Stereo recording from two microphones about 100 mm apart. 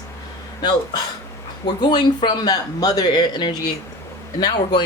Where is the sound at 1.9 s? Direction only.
45° left (ahead or behind).